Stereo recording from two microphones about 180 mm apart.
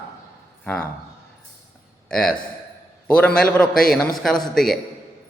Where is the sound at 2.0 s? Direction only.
5° left (ahead or behind).